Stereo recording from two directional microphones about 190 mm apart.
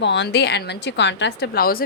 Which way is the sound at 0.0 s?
65° left (ahead or behind).